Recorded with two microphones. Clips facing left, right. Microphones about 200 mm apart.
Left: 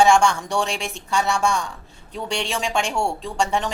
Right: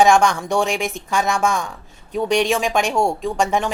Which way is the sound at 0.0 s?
15° right (ahead or behind).